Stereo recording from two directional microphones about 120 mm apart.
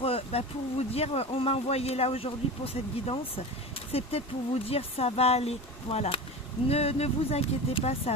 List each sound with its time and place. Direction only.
0.0 s speech: 55° left (ahead or behind)